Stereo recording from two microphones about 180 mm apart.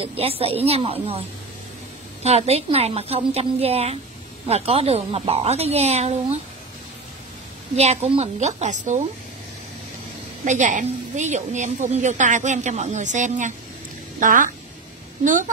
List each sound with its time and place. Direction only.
0.0 s a woman's voice: 30° right (ahead or behind)
2.2 s a woman's voice: 35° right (ahead or behind)
7.7 s a woman's voice: 35° right (ahead or behind)
10.4 s a woman's voice: 45° right (ahead or behind)